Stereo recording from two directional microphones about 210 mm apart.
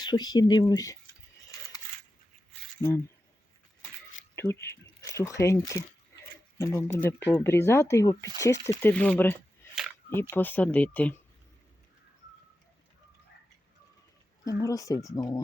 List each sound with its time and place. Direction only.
0.0 s speech: 20° left (ahead or behind)
4.4 s speech: 10° left (ahead or behind)
9.7 s a sound: 5° right (ahead or behind)
10.2 s speech: 10° left (ahead or behind)
14.4 s speech: 15° left (ahead or behind)